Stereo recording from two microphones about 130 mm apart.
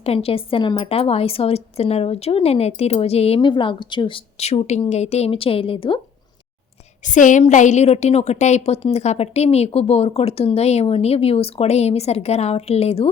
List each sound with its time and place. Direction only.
0.0 s a woman's voice: 50° left (ahead or behind)
0.9 s a woman's voice: 50° left (ahead or behind)
4.4 s a woman's voice: 60° left (ahead or behind)
7.0 s a woman's voice: 75° left (ahead or behind); by 13.1 s 50° left (ahead or behind)